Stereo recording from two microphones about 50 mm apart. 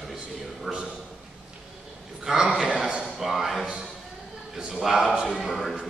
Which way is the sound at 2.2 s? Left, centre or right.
Centre.